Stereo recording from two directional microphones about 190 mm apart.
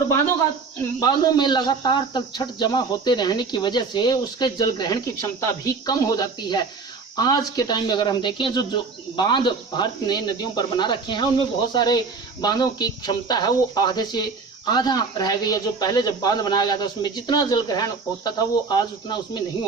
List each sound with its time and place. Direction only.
0.9 s speech: 20° left (ahead or behind)